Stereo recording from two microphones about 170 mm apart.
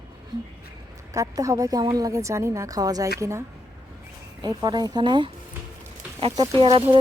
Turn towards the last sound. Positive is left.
turn(degrees=-35)  # may be behind; listen again after turning